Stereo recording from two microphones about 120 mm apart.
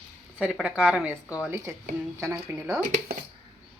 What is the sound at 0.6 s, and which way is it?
Speech, 5° right (ahead or behind).